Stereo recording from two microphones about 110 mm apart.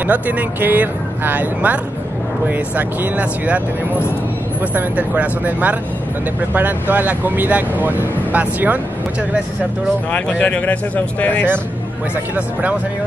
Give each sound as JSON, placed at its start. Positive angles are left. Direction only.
{"t": 0.0, "sound": "speech", "side_deg": -15}
{"t": 10.1, "sound": "speech", "side_deg": 10}